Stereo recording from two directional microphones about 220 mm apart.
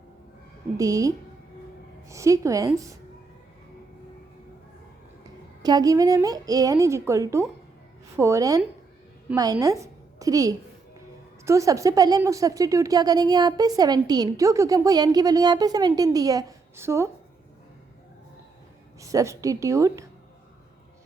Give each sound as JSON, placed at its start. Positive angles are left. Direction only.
{"t": 0.8, "sound": "a woman's voice", "side_deg": -15}
{"t": 5.6, "sound": "a woman's voice", "side_deg": -15}
{"t": 18.9, "sound": "a woman's voice", "side_deg": -15}